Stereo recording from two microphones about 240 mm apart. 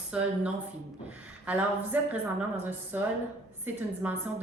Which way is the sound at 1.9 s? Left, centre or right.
Centre.